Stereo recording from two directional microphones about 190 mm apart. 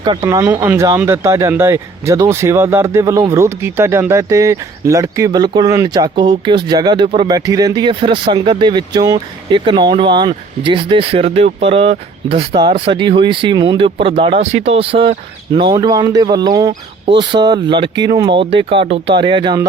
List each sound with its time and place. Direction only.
0.0 s speech: 25° right (ahead or behind)